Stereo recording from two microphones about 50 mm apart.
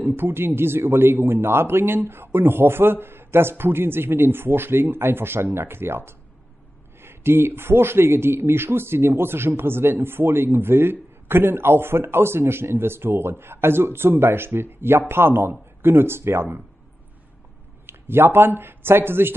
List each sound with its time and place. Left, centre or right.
0.0 s a man's voice: right
17.8 s speech: right